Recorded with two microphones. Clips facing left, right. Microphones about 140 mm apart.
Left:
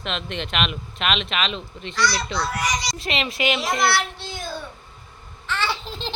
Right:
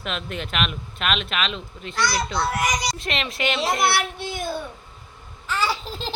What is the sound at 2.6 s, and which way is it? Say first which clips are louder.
Speech: right 1 dB; 50° right (ahead or behind).